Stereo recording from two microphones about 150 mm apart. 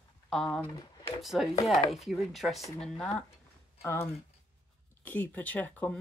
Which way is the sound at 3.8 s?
15° left (ahead or behind).